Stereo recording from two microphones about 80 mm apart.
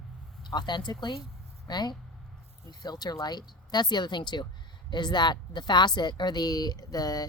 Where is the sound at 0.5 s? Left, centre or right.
Left.